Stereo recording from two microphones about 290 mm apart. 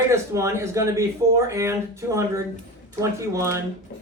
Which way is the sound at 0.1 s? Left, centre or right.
Centre.